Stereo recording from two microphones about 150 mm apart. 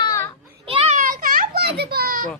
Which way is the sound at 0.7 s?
40° right (ahead or behind).